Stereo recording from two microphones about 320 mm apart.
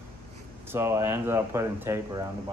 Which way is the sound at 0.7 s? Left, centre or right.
Centre.